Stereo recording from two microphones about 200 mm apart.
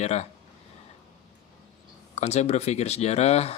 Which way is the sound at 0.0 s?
35° left (ahead or behind).